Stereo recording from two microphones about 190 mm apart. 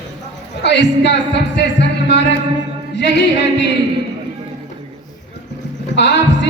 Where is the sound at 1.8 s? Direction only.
65° left (ahead or behind).